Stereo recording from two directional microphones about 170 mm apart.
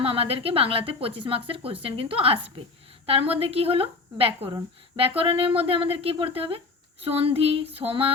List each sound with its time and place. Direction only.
0.0 s a woman's voice: 35° right (ahead or behind)